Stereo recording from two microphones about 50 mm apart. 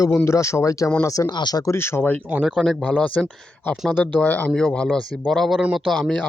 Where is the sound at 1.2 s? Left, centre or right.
Left.